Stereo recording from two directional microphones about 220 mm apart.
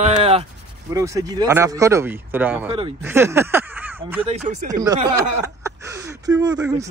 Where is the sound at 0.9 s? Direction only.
15° right (ahead or behind).